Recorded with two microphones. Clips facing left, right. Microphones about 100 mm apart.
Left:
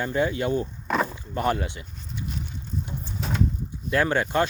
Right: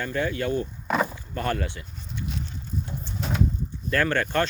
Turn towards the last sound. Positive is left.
turn(degrees=15)  # may be behind; listen again after turning